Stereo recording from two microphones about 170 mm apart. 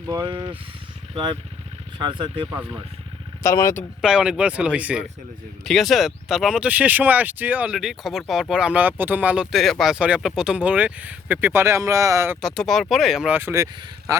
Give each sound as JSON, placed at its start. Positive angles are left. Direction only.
{"t": 0.1, "sound": "speech", "side_deg": -25}
{"t": 3.4, "sound": "speech", "side_deg": 20}
{"t": 4.0, "sound": "speech", "side_deg": -5}
{"t": 12.4, "sound": "speech", "side_deg": 0}